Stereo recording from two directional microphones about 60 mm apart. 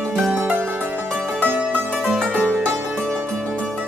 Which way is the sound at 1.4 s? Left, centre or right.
Right.